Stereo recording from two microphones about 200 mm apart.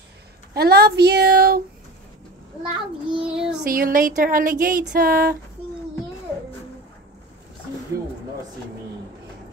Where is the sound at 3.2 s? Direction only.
5° right (ahead or behind).